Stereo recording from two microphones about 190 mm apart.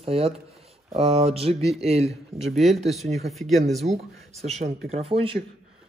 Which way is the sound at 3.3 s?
Centre (ahead or behind).